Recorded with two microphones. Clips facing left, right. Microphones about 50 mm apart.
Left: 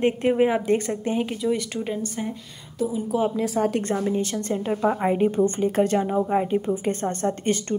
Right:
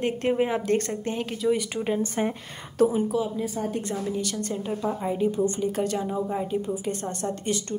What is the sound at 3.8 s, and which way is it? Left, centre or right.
A woman's voice, left.